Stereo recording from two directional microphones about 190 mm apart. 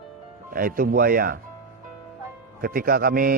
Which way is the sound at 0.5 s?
50° right (ahead or behind).